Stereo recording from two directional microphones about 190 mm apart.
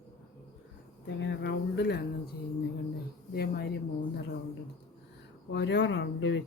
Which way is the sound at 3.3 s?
55° left (ahead or behind).